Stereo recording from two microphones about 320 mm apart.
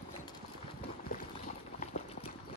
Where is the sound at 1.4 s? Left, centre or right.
Left.